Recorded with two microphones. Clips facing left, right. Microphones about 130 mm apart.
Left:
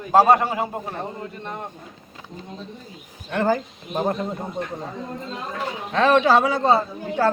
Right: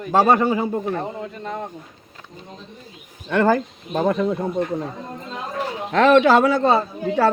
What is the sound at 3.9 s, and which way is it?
Speech, 90° right.